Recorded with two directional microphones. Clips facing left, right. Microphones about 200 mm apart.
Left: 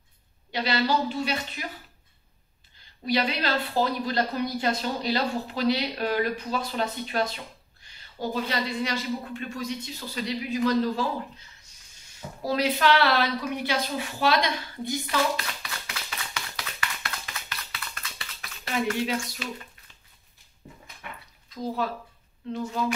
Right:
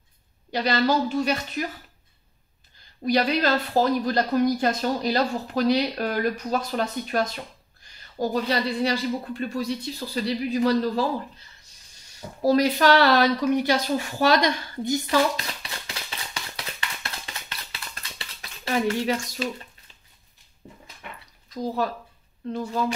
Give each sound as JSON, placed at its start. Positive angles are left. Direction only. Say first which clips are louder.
{"t": 0.5, "sound": "a woman's voice", "louder": "right 3 dB", "side_deg": -45}
{"t": 3.1, "sound": "a woman's voice", "louder": "right 5 dB", "side_deg": -45}
{"t": 12.4, "sound": "speech", "louder": "right 5 dB", "side_deg": -40}
{"t": 15.3, "sound": "a sound", "louder": "right 1 dB", "side_deg": -25}